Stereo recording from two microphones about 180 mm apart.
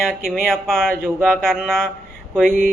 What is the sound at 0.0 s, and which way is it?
A man's voice, centre (ahead or behind).